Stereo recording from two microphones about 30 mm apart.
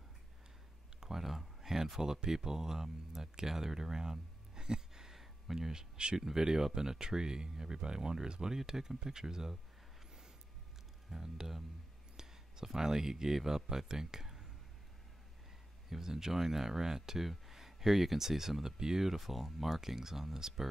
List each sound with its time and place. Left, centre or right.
1.1 s a sound: centre
2.2 s speech: centre
5.1 s a sound: centre
5.7 s speech: right
6.1 s speech: centre
11.1 s speech: centre
12.6 s speech: centre
15.9 s speech: centre
19.0 s speech: centre